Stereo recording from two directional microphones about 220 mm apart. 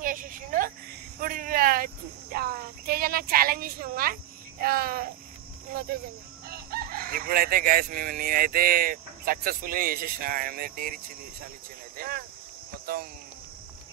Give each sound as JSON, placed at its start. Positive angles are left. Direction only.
{"t": 0.0, "sound": "a woman's voice", "side_deg": -40}
{"t": 1.2, "sound": "a sound", "side_deg": -40}
{"t": 2.3, "sound": "a woman's voice", "side_deg": -45}
{"t": 6.5, "sound": "crowing", "side_deg": -45}
{"t": 12.0, "sound": "speech", "side_deg": -45}